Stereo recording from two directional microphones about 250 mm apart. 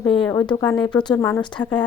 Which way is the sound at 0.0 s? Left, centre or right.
Centre.